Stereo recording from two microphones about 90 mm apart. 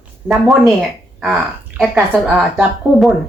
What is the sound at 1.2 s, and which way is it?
Speech, 5° right (ahead or behind).